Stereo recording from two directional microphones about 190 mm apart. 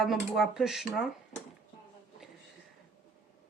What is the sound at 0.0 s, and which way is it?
Speech, centre (ahead or behind).